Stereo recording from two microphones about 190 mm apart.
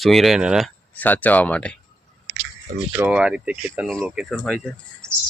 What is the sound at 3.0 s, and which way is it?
Speech, 5° right (ahead or behind).